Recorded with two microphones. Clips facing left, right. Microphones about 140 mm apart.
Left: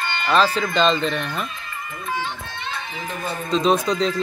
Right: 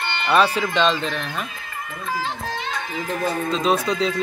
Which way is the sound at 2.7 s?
90° right.